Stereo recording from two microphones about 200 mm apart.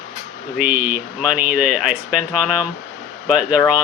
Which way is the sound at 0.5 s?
10° right (ahead or behind).